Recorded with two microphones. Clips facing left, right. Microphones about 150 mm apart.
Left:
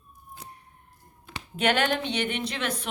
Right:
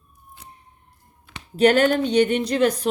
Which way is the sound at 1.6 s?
40° right (ahead or behind).